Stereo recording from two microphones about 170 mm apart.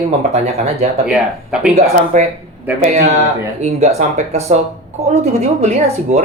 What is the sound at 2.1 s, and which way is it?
Speech, 45° right (ahead or behind).